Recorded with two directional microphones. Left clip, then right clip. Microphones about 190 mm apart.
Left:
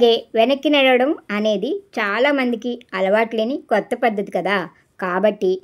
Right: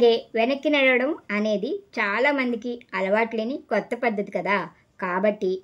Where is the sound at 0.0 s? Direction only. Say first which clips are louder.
Left 5 dB; 25° left (ahead or behind).